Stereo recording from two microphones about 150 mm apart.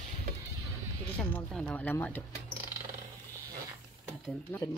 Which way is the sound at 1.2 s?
5° left (ahead or behind).